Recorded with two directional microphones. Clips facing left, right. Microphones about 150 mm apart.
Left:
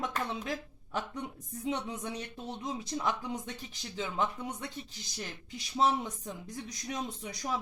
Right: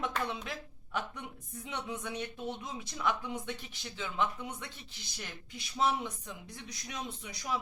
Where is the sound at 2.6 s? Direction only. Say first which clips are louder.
Left 4 dB; 35° left (ahead or behind).